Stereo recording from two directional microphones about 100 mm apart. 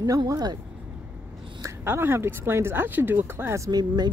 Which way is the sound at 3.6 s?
45° right (ahead or behind).